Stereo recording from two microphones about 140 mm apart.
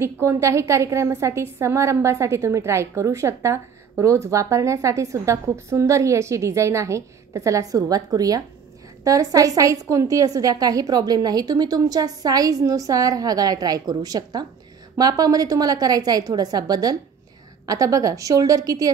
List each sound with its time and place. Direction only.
0.0 s a woman's voice: 20° right (ahead or behind)